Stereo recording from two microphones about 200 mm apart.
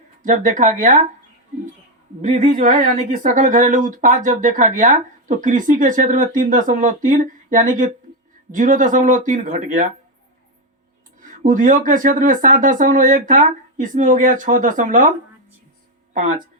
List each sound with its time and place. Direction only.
0.2 s speech: 40° right (ahead or behind)
2.2 s speech: 40° right (ahead or behind)
11.2 s speech: 40° right (ahead or behind)